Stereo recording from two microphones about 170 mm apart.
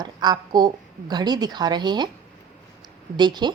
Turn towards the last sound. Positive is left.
turn(degrees=-25)  # may be behind; listen again after turning